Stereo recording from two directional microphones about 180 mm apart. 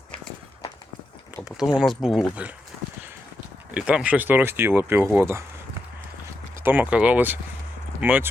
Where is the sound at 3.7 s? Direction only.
5° right (ahead or behind).